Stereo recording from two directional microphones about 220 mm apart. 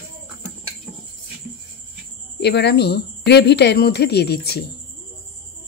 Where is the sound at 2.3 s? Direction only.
50° left (ahead or behind).